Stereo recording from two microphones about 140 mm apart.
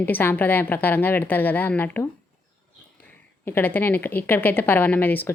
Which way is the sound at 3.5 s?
15° left (ahead or behind).